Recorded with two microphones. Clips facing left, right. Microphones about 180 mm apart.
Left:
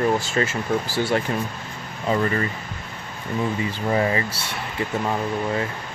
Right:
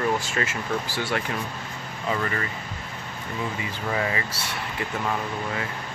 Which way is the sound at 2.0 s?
35° left (ahead or behind).